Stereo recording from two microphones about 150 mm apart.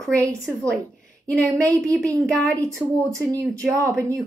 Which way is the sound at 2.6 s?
20° right (ahead or behind).